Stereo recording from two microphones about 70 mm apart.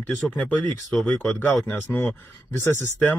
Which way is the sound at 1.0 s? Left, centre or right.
Left.